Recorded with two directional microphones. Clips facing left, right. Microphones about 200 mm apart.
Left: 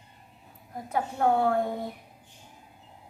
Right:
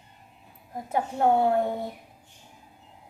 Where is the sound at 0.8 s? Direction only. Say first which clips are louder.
Right 2 dB; 25° right (ahead or behind).